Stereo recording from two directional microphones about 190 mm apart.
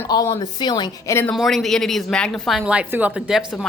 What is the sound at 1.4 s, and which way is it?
Speech, centre (ahead or behind).